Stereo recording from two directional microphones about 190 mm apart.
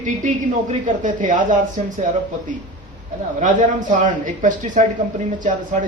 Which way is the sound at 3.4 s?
40° right (ahead or behind).